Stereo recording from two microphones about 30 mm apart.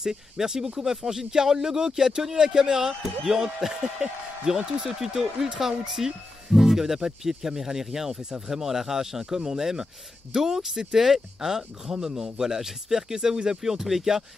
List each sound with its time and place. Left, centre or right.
0.0 s speech: centre
4.0 s speech: right